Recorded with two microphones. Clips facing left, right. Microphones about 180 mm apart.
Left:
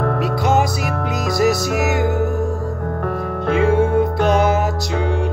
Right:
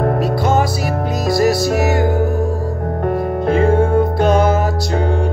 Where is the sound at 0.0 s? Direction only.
40° right (ahead or behind).